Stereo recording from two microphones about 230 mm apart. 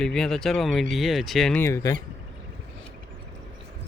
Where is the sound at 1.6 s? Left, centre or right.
Centre.